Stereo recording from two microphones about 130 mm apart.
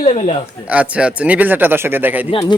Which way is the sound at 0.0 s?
55° left (ahead or behind).